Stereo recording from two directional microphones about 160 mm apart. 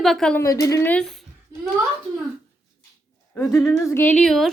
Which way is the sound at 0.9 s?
Centre (ahead or behind).